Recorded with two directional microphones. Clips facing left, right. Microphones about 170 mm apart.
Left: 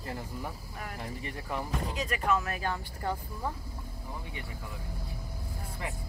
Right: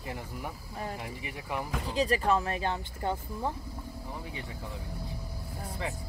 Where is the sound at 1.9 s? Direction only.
35° right (ahead or behind).